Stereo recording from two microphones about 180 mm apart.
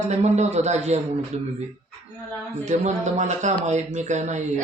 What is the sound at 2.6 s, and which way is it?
A man's voice, 40° right (ahead or behind).